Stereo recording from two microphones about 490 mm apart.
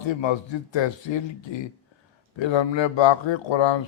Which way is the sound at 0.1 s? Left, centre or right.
Left.